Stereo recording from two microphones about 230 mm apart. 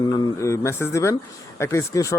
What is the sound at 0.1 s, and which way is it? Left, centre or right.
Speech, centre.